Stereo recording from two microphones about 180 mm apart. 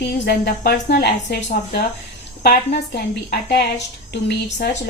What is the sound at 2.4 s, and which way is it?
Speech, 65° left (ahead or behind).